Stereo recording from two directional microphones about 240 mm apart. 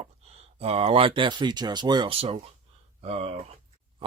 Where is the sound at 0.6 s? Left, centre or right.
Right.